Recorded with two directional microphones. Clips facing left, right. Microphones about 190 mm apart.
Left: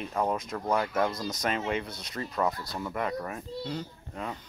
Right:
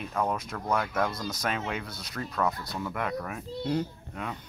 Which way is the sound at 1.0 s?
20° left (ahead or behind).